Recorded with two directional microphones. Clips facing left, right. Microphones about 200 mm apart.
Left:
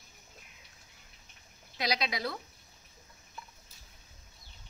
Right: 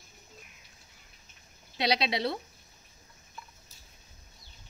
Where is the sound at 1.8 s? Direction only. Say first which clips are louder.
Right 5 dB; 30° right (ahead or behind).